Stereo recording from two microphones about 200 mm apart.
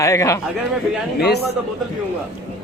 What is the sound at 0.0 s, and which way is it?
Speech, 15° left (ahead or behind).